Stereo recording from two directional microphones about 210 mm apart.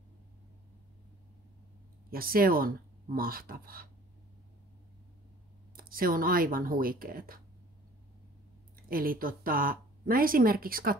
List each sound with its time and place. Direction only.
2.0 s speech: 45° right (ahead or behind)
5.8 s speech: 45° right (ahead or behind)
8.8 s speech: 45° right (ahead or behind)